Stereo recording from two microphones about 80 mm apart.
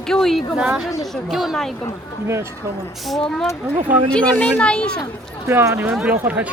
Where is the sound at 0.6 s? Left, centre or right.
Centre.